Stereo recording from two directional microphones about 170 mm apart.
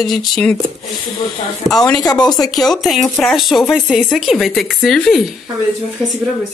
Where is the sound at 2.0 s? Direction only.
25° left (ahead or behind).